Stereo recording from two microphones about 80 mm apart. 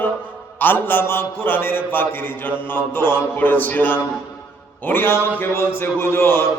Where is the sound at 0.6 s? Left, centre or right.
Left.